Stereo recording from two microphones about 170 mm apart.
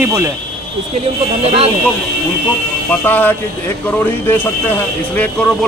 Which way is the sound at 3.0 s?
10° left (ahead or behind).